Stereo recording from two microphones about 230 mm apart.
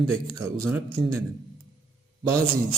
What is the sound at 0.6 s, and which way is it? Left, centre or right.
Speech, centre.